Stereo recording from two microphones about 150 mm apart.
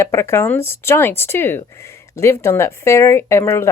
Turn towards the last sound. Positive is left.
turn(degrees=20)  # may be behind; listen again after turning